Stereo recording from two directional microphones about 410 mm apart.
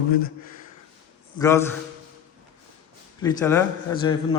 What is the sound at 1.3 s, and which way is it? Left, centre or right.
Speech, centre.